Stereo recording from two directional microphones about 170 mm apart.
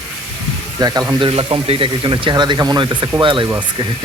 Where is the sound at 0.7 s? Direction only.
20° right (ahead or behind).